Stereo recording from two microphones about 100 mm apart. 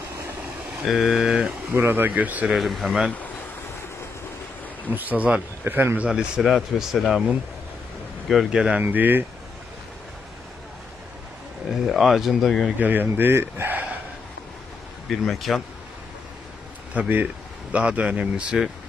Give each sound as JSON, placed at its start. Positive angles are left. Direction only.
{"t": 0.8, "sound": "speech", "side_deg": 0}
{"t": 1.7, "sound": "speech", "side_deg": -20}
{"t": 2.4, "sound": "speech", "side_deg": 0}
{"t": 4.8, "sound": "speech", "side_deg": -15}
{"t": 6.0, "sound": "speech", "side_deg": -5}
{"t": 8.3, "sound": "speech", "side_deg": -5}
{"t": 8.8, "sound": "speech", "side_deg": -20}
{"t": 11.9, "sound": "speech", "side_deg": 0}
{"t": 12.7, "sound": "speech", "side_deg": -20}
{"t": 15.0, "sound": "speech", "side_deg": 0}
{"t": 16.9, "sound": "speech", "side_deg": -15}